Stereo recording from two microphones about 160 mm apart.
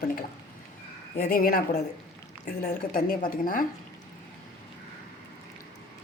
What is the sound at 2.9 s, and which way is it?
Speech, 65° left (ahead or behind).